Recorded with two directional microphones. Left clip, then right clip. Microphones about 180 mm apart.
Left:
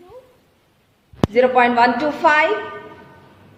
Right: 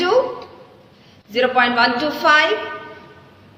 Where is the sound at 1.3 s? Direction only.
25° left (ahead or behind).